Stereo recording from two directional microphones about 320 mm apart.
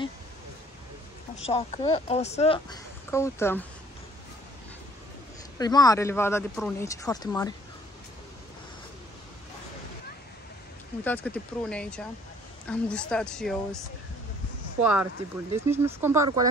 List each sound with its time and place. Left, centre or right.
1.4 s a woman's voice: centre
5.6 s a woman's voice: centre
11.1 s speech: centre
14.8 s speech: centre